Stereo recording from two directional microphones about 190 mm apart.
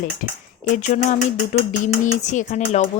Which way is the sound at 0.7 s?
35° left (ahead or behind).